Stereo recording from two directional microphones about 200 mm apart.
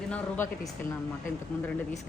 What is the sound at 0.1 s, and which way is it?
Speech, 10° left (ahead or behind).